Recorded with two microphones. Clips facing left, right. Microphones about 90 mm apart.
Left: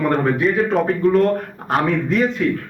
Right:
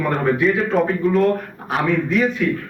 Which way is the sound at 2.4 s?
35° left (ahead or behind).